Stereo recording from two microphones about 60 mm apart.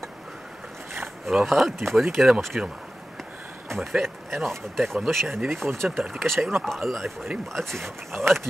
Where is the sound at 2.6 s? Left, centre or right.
Centre.